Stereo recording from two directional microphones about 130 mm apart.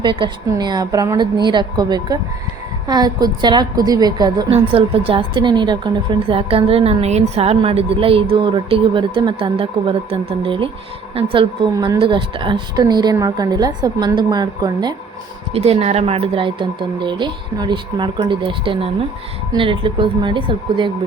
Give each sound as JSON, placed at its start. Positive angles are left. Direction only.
{"t": 0.0, "sound": "a woman's voice", "side_deg": -40}
{"t": 4.5, "sound": "a woman's voice", "side_deg": -45}
{"t": 11.7, "sound": "speech", "side_deg": -25}
{"t": 11.9, "sound": "a woman's voice", "side_deg": -40}
{"t": 15.5, "sound": "a woman's voice", "side_deg": -50}